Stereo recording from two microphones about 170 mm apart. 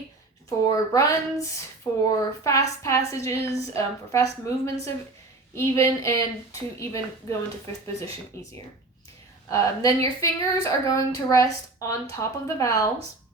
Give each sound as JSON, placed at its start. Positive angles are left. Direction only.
{"t": 0.6, "sound": "a woman's voice", "side_deg": 20}
{"t": 8.3, "sound": "a woman's voice", "side_deg": 15}